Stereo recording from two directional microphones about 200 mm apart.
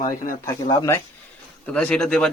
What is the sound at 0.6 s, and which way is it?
Speech, 20° left (ahead or behind).